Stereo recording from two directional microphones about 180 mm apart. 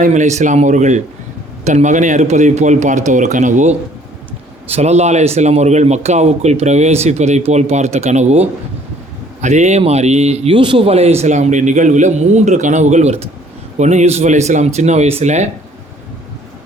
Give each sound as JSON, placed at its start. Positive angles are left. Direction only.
{"t": 0.0, "sound": "a man's voice", "side_deg": -40}